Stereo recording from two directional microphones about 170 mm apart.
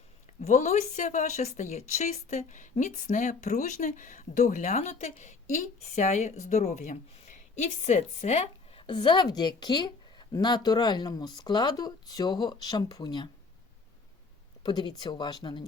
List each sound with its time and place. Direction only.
0.4 s a woman's voice: 45° left (ahead or behind)
8.9 s a woman's voice: 25° left (ahead or behind)
14.6 s a woman's voice: 25° left (ahead or behind)